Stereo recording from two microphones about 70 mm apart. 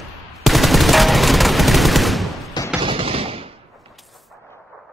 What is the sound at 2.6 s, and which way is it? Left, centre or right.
Fusillade, left.